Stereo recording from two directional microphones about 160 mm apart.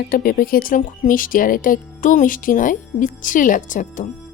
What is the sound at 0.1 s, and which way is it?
Speech, 65° left (ahead or behind).